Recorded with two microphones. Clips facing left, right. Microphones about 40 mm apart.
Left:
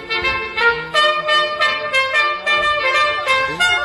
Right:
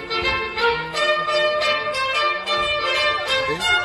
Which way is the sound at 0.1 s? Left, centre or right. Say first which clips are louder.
Left 3 dB; left.